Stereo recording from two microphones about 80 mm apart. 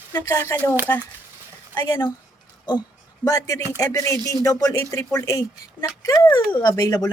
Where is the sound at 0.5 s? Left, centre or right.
Left.